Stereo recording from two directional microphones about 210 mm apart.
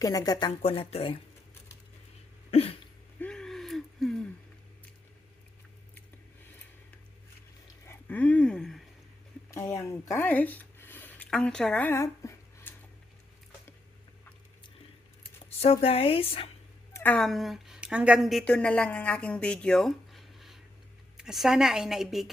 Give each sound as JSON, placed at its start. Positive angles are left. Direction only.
{"t": 0.0, "sound": "a woman's voice", "side_deg": 15}
{"t": 2.5, "sound": "cough", "side_deg": 30}
{"t": 3.2, "sound": "gasp", "side_deg": 5}
{"t": 7.9, "sound": "a sound", "side_deg": 10}
{"t": 9.7, "sound": "speech", "side_deg": 15}
{"t": 15.4, "sound": "a woman's voice", "side_deg": 30}
{"t": 16.9, "sound": "a woman's voice", "side_deg": 10}